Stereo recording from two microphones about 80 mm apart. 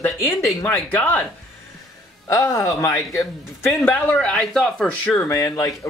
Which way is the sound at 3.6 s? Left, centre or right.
Left.